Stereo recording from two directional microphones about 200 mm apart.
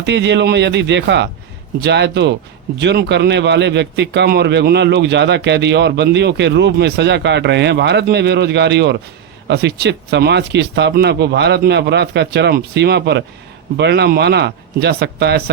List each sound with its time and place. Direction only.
0.0 s speech: 60° right (ahead or behind)